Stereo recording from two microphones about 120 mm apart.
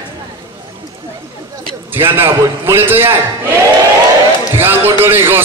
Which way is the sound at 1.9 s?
20° right (ahead or behind).